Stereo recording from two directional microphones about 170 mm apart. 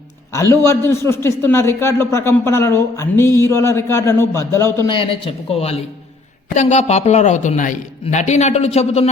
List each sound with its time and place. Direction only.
0.3 s a man's voice: 15° left (ahead or behind)
4.9 s speech: 30° left (ahead or behind)